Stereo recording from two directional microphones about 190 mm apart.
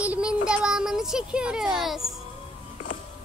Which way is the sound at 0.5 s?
5° right (ahead or behind).